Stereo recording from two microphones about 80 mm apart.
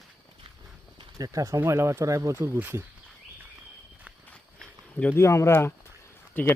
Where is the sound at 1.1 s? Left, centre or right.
Right.